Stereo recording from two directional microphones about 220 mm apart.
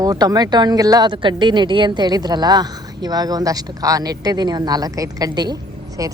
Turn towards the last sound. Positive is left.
turn(degrees=-15)  # may be behind; listen again after turning